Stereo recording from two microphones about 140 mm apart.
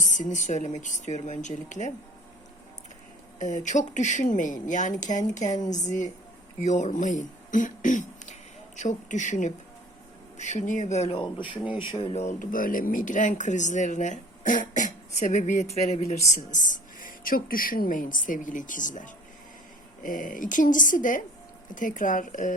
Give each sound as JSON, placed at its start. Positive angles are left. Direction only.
{"t": 0.1, "sound": "speech", "side_deg": 60}
{"t": 3.3, "sound": "speech", "side_deg": 60}
{"t": 11.2, "sound": "speech", "side_deg": 35}